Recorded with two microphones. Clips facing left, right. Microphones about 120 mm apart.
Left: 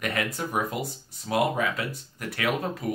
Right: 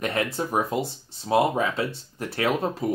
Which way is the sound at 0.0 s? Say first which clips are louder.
Right 3 dB; 30° right (ahead or behind).